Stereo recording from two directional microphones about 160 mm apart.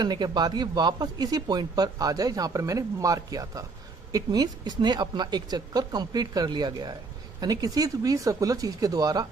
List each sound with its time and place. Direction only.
0.0 s speech: 25° right (ahead or behind)